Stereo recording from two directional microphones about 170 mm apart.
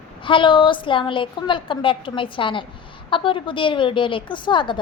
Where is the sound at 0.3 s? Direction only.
30° left (ahead or behind).